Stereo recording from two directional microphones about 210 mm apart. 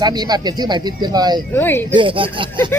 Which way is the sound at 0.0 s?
20° right (ahead or behind).